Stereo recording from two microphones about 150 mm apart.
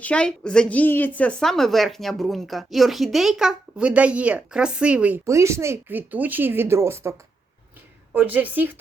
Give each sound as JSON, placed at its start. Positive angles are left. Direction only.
{"t": 0.0, "sound": "a woman's voice", "side_deg": 5}
{"t": 5.2, "sound": "speech", "side_deg": -20}